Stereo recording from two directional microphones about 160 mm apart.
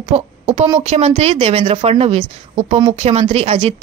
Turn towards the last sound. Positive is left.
turn(degrees=-40)  # may be behind; listen again after turning